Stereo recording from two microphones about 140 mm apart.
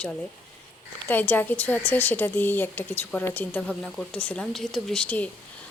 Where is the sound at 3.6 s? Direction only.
Centre (ahead or behind).